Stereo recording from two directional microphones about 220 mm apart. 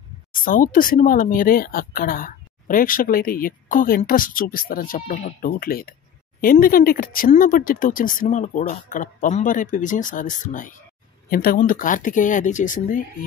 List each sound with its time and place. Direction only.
0.3 s speech: 40° left (ahead or behind)